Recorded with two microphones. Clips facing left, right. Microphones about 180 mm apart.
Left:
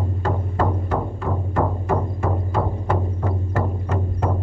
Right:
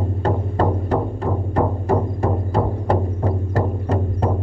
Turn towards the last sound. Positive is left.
turn(degrees=-35)  # may be behind; listen again after turning